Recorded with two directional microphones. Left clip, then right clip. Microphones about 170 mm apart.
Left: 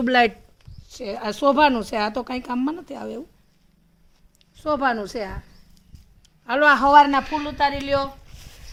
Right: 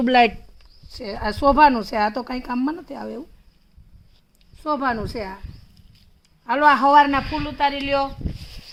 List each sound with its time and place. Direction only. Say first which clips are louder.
0.0 s speech: right 2 dB; 35° right (ahead or behind)
4.5 s speech: left 1 dB; 30° right (ahead or behind)
6.4 s speech: right 1 dB; 30° right (ahead or behind)
7.2 s speech: even; 5° right (ahead or behind)